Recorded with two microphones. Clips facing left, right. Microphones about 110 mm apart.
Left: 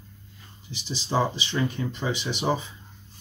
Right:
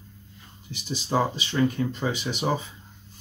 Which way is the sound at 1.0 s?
10° right (ahead or behind).